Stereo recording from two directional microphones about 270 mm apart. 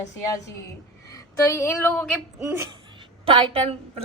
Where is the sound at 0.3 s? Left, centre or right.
Centre.